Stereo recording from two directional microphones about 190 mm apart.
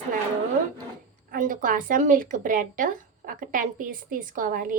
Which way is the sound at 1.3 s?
45° right (ahead or behind).